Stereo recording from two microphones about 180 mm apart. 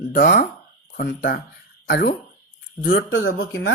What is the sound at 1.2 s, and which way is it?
Speech, 75° left (ahead or behind).